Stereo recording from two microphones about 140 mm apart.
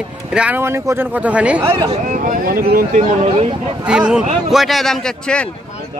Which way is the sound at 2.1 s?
75° right (ahead or behind).